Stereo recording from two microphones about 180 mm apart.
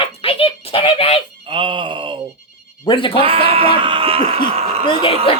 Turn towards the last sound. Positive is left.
turn(degrees=30)  # may be behind; listen again after turning